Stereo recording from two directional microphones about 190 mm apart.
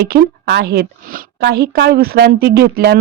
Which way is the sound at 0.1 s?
55° right (ahead or behind).